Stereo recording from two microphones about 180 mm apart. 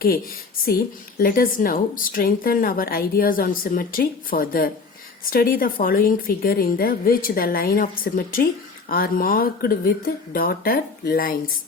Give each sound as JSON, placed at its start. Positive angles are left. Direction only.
{"t": 1.2, "sound": "a woman's voice", "side_deg": 50}